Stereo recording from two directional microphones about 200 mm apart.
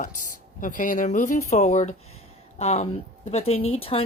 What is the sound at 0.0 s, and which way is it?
A woman's voice, 40° left (ahead or behind).